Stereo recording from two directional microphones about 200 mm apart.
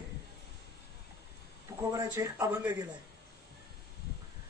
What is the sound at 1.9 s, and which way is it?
Speech, 15° right (ahead or behind).